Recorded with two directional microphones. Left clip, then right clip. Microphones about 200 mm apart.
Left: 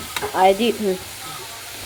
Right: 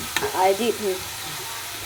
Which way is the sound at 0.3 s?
20° left (ahead or behind).